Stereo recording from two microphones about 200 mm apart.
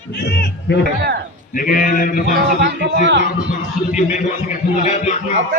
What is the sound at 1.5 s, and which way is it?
Speech, 45° left (ahead or behind).